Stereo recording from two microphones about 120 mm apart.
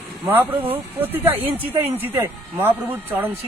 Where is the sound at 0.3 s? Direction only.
15° right (ahead or behind).